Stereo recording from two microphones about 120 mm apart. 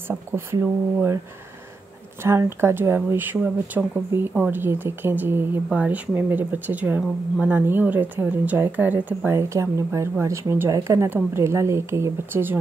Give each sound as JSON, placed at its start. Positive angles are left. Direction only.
{"t": 0.1, "sound": "speech", "side_deg": -20}
{"t": 2.2, "sound": "speech", "side_deg": -20}